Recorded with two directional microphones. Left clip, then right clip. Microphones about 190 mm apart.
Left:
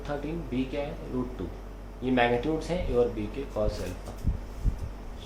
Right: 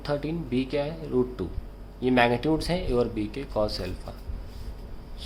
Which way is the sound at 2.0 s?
50° right (ahead or behind).